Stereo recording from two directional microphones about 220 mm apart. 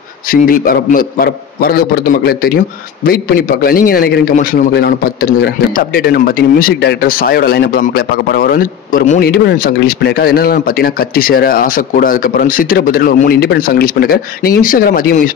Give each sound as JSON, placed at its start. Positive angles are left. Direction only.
{"t": 0.3, "sound": "a man's voice", "side_deg": 40}